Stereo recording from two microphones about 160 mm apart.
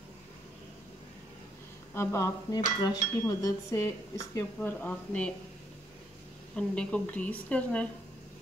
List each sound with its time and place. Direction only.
2.0 s a woman's voice: 15° left (ahead or behind)
6.5 s a woman's voice: 5° left (ahead or behind)